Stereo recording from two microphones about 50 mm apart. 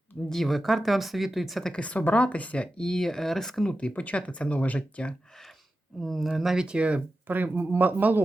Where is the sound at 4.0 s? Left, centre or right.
Left.